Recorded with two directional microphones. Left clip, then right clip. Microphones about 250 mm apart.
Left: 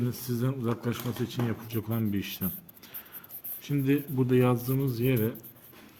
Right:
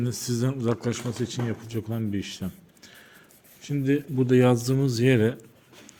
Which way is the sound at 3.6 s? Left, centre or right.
Centre.